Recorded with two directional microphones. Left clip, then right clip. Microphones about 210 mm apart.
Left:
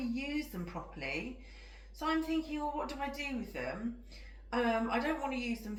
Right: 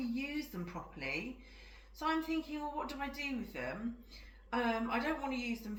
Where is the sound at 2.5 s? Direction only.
30° left (ahead or behind).